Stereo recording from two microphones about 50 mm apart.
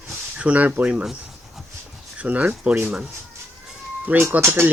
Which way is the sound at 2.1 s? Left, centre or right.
Right.